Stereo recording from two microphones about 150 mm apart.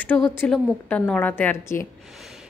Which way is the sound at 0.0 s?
10° left (ahead or behind).